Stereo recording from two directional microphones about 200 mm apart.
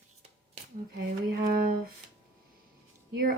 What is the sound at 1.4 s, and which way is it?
Speech, 45° right (ahead or behind).